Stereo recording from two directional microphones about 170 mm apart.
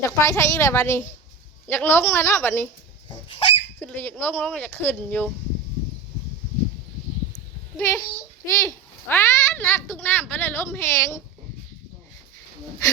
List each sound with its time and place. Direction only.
0.0 s a child's voice: 20° left (ahead or behind)
3.2 s a sound: 30° left (ahead or behind)
3.8 s a child's voice: 10° left (ahead or behind)
7.8 s a child's voice: 10° left (ahead or behind)